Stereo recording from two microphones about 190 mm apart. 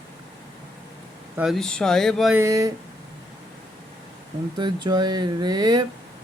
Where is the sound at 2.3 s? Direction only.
15° right (ahead or behind).